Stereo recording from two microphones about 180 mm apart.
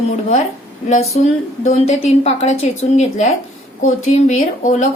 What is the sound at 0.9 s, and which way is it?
A woman's voice, 40° left (ahead or behind).